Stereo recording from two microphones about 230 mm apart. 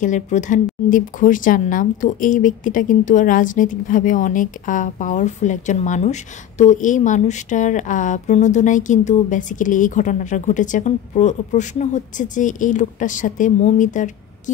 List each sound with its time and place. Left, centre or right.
0.0 s speech: left